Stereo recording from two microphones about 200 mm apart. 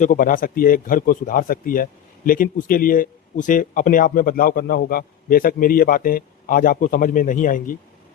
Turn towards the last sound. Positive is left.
turn(degrees=40)  # may be behind; listen again after turning